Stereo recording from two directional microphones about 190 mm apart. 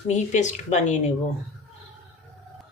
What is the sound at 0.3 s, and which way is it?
Speech, 40° left (ahead or behind).